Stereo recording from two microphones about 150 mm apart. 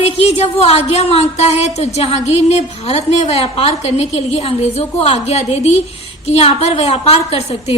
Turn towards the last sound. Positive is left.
turn(degrees=45)  # may be behind; listen again after turning